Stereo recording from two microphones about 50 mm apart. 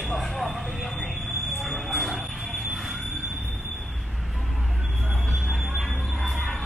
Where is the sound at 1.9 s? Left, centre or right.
Centre.